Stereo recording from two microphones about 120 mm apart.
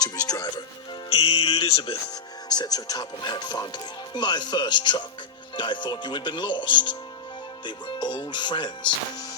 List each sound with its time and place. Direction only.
0.0 s music: 30° left (ahead or behind)
1.1 s music: 55° left (ahead or behind)
2.5 s speech: 35° left (ahead or behind)